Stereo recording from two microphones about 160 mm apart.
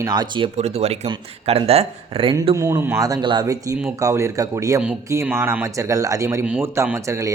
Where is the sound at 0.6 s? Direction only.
40° right (ahead or behind).